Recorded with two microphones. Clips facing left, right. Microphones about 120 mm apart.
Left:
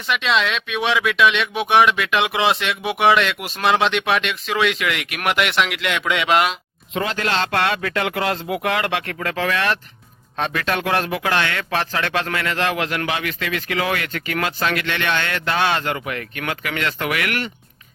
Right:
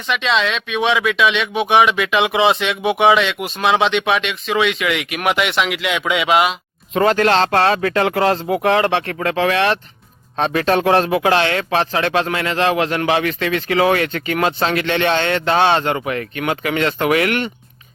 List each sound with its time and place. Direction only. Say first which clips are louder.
0.1 s speech: right 2 dB; centre (ahead or behind)
6.9 s speech: right 8 dB; 45° right (ahead or behind); by 17.5 s 25° right (ahead or behind)